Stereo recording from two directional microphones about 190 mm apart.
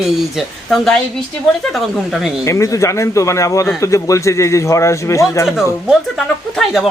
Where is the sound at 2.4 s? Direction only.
15° left (ahead or behind).